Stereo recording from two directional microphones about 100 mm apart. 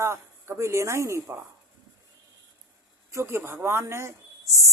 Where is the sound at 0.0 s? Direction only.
30° right (ahead or behind).